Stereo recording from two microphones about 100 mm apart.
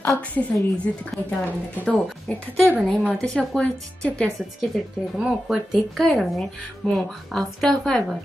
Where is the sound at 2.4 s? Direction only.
15° left (ahead or behind).